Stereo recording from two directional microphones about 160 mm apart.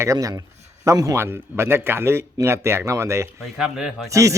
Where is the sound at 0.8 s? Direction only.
20° right (ahead or behind).